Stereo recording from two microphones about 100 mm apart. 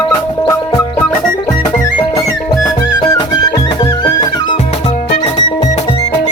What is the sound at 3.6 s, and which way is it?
Music, 50° left (ahead or behind).